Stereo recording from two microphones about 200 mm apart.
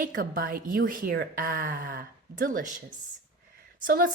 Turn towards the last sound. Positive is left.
turn(degrees=-45)  # may be behind; listen again after turning